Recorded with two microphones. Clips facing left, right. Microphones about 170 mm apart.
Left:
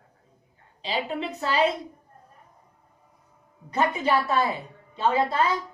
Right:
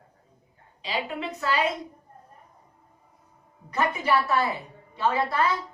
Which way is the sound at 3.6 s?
25° left (ahead or behind).